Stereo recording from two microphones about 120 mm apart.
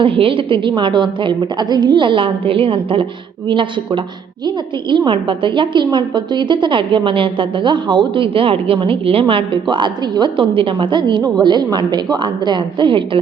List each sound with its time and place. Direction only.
0.0 s a woman's voice: 45° right (ahead or behind)